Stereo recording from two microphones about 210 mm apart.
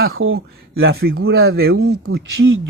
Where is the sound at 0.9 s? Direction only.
50° right (ahead or behind).